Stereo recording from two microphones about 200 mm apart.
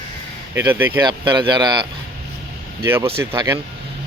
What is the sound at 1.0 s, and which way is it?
Speech, 20° right (ahead or behind).